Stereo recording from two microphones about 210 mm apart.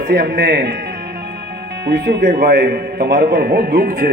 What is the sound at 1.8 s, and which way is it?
A man's voice, 50° right (ahead or behind).